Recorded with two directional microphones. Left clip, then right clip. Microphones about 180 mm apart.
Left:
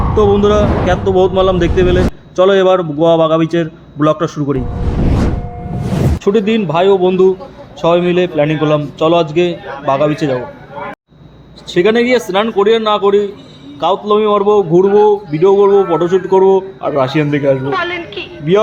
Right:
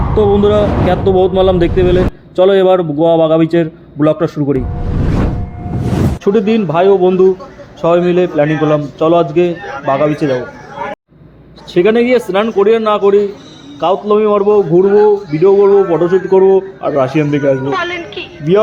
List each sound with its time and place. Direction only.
0.2 s speech: 15° right (ahead or behind)
5.8 s speech: 15° right (ahead or behind)
11.7 s speech: 15° right (ahead or behind)
17.7 s a sound: centre (ahead or behind)